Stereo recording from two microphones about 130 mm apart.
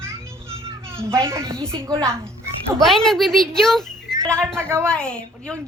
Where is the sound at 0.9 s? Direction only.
20° right (ahead or behind).